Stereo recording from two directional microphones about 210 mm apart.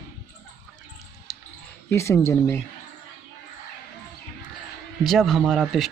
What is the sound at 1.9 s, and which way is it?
Speech, 15° left (ahead or behind).